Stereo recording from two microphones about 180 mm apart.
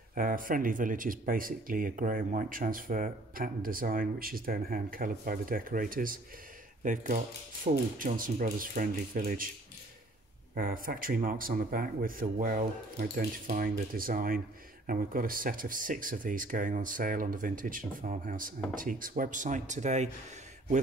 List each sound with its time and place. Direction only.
0.1 s speech: 50° right (ahead or behind)
10.5 s speech: 55° right (ahead or behind)